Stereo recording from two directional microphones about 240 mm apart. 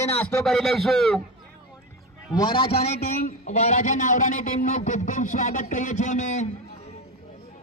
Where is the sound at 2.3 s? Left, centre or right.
Centre.